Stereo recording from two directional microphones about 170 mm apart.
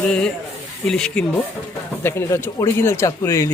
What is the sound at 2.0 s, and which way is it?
Speech, 15° left (ahead or behind).